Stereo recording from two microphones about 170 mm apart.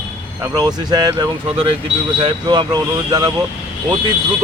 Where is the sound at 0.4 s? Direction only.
20° right (ahead or behind).